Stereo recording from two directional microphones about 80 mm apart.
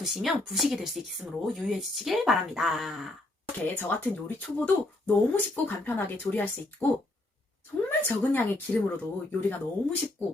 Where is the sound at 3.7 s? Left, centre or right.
Left.